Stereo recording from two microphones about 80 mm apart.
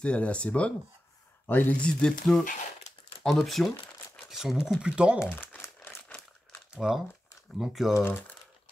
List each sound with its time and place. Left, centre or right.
0.0 s speech: centre
1.5 s speech: left
1.8 s speech: centre
5.2 s crumpling: left
6.7 s crumpling: centre
7.5 s speech: centre
8.0 s speech: left